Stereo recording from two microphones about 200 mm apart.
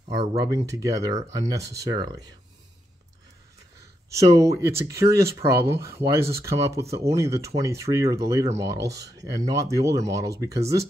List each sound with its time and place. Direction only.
0.7 s speech: 15° right (ahead or behind)
3.8 s speech: 15° right (ahead or behind)